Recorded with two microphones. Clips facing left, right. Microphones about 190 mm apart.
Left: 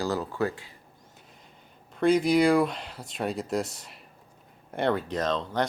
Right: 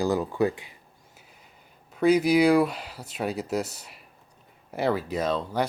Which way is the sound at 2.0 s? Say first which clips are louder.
Right 2 dB; 5° right (ahead or behind).